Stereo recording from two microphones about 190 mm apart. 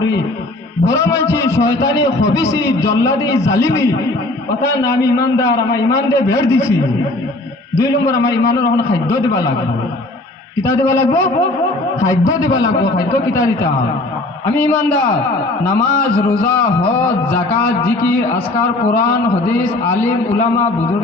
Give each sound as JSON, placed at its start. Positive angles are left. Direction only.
{"t": 0.9, "sound": "a man's voice", "side_deg": 15}
{"t": 7.8, "sound": "a man's voice", "side_deg": 15}
{"t": 10.7, "sound": "a man's voice", "side_deg": 10}
{"t": 12.3, "sound": "a man's voice", "side_deg": 15}